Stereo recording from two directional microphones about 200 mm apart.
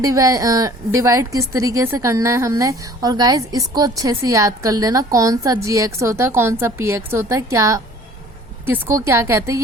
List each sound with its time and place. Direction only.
0.0 s a woman's voice: 15° right (ahead or behind)